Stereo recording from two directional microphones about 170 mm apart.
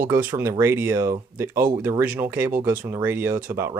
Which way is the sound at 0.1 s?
10° right (ahead or behind).